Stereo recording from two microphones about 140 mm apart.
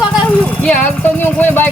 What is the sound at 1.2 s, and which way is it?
Speech, 15° left (ahead or behind).